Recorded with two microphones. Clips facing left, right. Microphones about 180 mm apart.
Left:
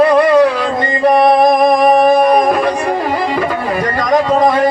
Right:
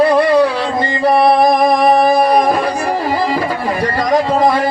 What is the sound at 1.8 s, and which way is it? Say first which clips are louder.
Music: left 2 dB; 30° right (ahead or behind).